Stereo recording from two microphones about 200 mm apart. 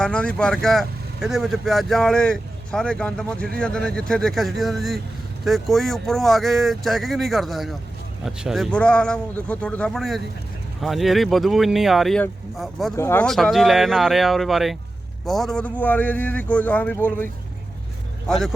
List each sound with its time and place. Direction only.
0.0 s speech: 5° left (ahead or behind)
13.0 s a man's voice: 15° left (ahead or behind)
13.2 s a man's voice: centre (ahead or behind)
18.3 s speech: centre (ahead or behind)